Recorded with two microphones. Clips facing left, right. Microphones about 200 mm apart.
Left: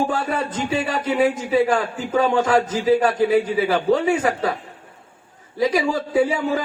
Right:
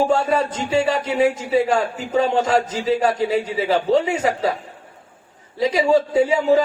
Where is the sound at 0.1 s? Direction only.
25° right (ahead or behind).